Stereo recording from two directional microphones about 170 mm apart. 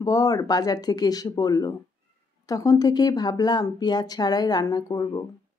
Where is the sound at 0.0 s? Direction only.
20° left (ahead or behind).